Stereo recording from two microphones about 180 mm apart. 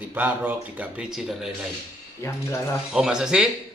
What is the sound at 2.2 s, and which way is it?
Speech, 15° left (ahead or behind).